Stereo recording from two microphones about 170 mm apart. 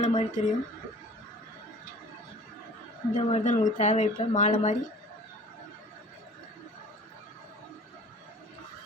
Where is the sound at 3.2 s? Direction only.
40° left (ahead or behind).